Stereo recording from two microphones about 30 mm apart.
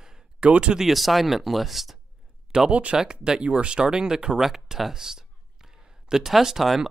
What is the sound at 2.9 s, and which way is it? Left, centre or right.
Speech, centre.